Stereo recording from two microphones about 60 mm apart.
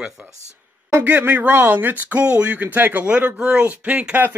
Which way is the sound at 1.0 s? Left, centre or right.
Right.